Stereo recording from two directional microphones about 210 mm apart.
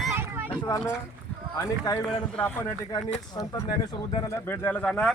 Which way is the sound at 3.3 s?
20° left (ahead or behind).